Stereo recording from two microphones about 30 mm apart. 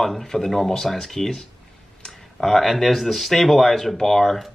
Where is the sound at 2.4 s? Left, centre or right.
Centre.